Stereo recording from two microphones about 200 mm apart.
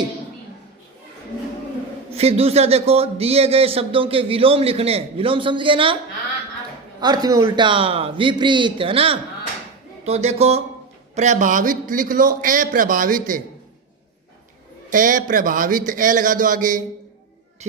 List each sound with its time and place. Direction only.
2.1 s a man's voice: 30° right (ahead or behind)
7.0 s a man's voice: 20° right (ahead or behind); by 13.4 s 45° right (ahead or behind)
14.8 s a man's voice: 40° right (ahead or behind)